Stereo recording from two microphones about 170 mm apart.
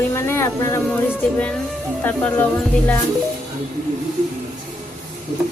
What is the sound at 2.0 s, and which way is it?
Speech, 10° left (ahead or behind).